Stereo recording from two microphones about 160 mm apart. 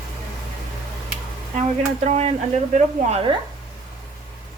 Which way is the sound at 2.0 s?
40° right (ahead or behind).